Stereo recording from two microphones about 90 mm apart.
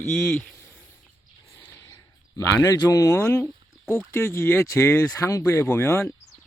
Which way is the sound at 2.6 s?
40° left (ahead or behind).